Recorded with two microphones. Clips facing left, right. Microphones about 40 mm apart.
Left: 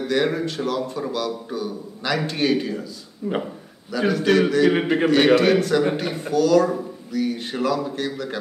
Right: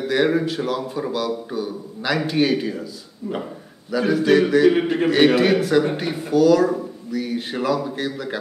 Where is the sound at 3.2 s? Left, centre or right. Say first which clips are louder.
Left 3 dB; left.